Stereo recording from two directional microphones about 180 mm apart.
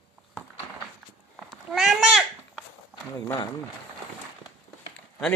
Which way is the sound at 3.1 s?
20° left (ahead or behind).